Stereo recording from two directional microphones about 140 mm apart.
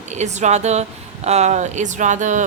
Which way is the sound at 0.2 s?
55° right (ahead or behind).